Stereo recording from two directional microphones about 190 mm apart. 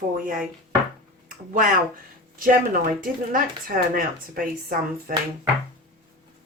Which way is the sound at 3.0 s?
50° right (ahead or behind).